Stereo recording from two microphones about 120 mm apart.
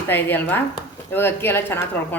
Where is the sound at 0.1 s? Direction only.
15° left (ahead or behind).